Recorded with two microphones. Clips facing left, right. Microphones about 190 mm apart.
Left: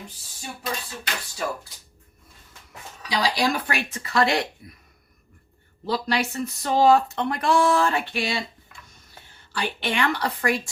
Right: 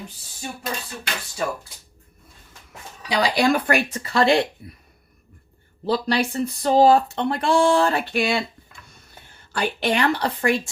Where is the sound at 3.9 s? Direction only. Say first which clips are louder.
Right 4 dB; 35° right (ahead or behind).